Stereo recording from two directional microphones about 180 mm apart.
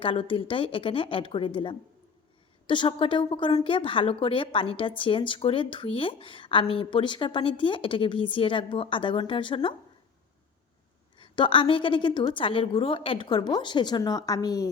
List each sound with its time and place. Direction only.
0.0 s a woman's voice: 30° left (ahead or behind)
11.2 s a woman's voice: 30° left (ahead or behind)